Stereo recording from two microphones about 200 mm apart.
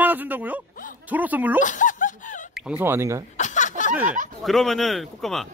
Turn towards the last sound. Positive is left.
turn(degrees=0)  # may be behind; listen again after turning